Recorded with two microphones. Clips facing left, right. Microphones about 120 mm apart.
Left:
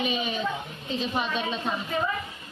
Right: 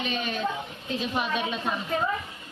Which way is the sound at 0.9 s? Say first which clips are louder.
Even; centre (ahead or behind).